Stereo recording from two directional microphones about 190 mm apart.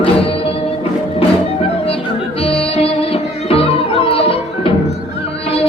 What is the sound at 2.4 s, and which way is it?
Music, 30° left (ahead or behind).